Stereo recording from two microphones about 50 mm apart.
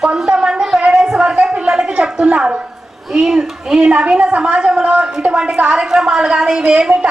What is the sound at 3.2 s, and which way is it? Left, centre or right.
Speech, centre.